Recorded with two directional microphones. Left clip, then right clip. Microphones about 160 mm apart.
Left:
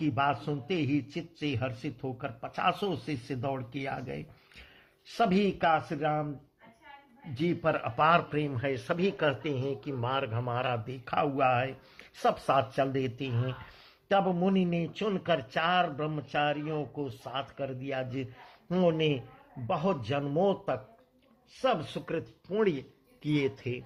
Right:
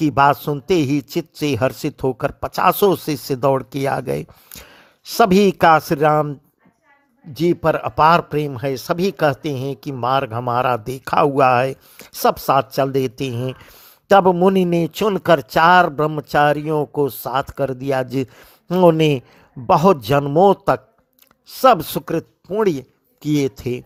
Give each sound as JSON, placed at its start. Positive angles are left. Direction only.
{"t": 0.0, "sound": "a man's voice", "side_deg": -50}
{"t": 7.3, "sound": "a man's voice", "side_deg": -45}
{"t": 23.2, "sound": "a man's voice", "side_deg": -45}